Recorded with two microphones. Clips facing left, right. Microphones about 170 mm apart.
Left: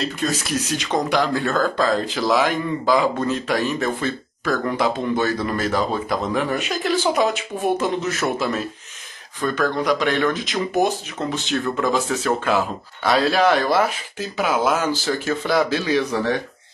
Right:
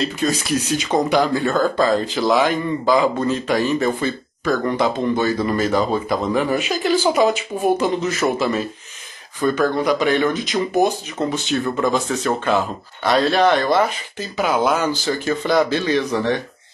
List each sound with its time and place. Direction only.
0.0 s speech: centre (ahead or behind)